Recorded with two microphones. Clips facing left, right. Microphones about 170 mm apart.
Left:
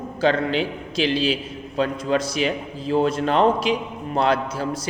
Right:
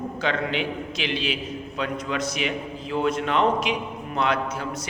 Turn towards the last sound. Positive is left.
turn(degrees=35)  # may be behind; listen again after turning